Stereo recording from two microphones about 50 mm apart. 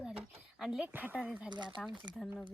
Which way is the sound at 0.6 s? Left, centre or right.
Centre.